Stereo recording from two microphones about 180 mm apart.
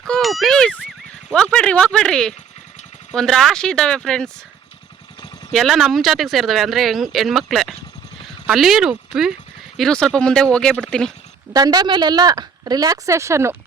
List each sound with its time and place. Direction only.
0.0 s a sound: centre (ahead or behind)
1.3 s speech: 5° left (ahead or behind)
5.5 s speech: centre (ahead or behind)
11.5 s speech: 20° right (ahead or behind)